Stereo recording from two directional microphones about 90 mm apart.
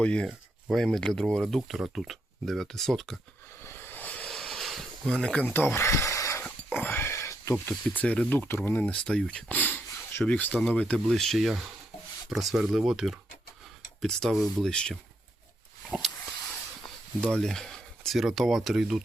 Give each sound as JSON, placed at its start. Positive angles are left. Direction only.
{"t": 0.0, "sound": "speech", "side_deg": 10}
{"t": 3.6, "sound": "a sound", "side_deg": 25}
{"t": 4.3, "sound": "a sound", "side_deg": 5}
{"t": 6.4, "sound": "dog", "side_deg": 20}
{"t": 7.9, "sound": "speech", "side_deg": 15}
{"t": 17.3, "sound": "speech", "side_deg": 5}